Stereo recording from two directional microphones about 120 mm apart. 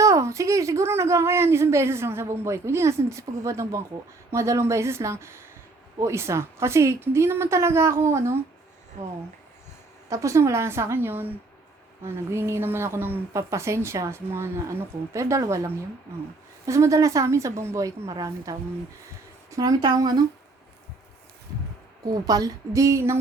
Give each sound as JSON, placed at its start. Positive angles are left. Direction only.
{"t": 0.0, "sound": "speech", "side_deg": -25}
{"t": 10.1, "sound": "speech", "side_deg": -25}
{"t": 22.0, "sound": "speech", "side_deg": -30}